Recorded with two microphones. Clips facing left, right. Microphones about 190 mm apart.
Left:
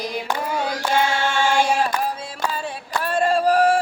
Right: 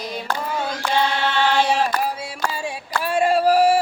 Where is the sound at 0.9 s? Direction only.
45° left (ahead or behind).